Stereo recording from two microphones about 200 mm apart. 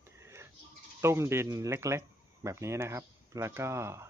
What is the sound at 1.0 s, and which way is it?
Speech, 10° right (ahead or behind).